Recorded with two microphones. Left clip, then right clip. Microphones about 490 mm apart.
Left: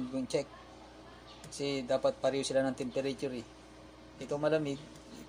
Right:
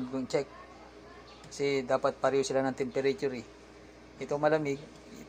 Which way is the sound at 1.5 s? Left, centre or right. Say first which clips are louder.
Right 4 dB; right.